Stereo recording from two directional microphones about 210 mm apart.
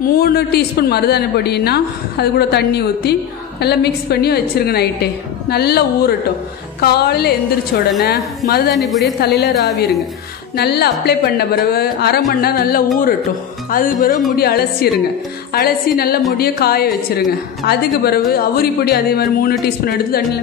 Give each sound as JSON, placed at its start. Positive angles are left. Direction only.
{"t": 0.2, "sound": "a woman's voice", "side_deg": 50}
{"t": 8.7, "sound": "a woman's voice", "side_deg": 0}
{"t": 9.2, "sound": "a woman's voice", "side_deg": 50}
{"t": 10.5, "sound": "a woman's voice", "side_deg": 50}